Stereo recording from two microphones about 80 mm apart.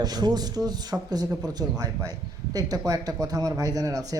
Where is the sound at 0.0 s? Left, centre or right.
Right.